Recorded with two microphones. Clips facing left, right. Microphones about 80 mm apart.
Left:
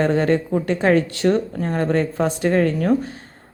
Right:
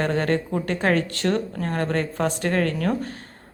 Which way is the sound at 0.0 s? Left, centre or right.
Left.